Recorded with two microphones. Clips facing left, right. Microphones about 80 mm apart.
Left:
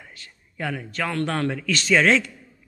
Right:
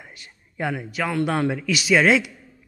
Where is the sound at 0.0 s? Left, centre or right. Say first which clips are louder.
Right 1 dB; centre.